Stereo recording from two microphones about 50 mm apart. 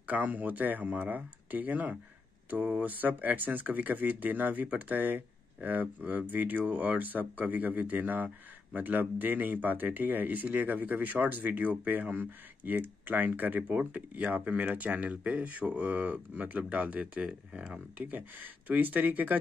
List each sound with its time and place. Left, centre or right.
0.0 s speech: right
13.7 s speech: right